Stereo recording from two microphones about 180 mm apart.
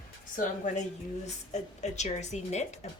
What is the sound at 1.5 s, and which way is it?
Speech, 40° left (ahead or behind).